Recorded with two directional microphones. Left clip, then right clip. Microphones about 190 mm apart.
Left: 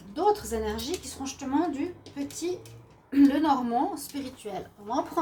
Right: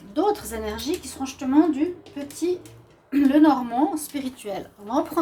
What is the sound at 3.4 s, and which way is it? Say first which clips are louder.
Speech: right 6 dB; 40° right (ahead or behind).